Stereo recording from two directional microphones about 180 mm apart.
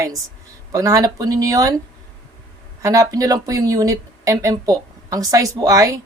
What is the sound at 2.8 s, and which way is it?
Speech, 20° right (ahead or behind).